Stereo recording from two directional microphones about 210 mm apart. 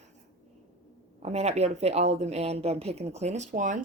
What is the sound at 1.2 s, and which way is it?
Speech, 30° right (ahead or behind).